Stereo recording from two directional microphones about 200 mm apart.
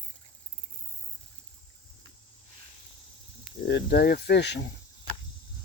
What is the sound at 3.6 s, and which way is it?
Speech, 55° left (ahead or behind).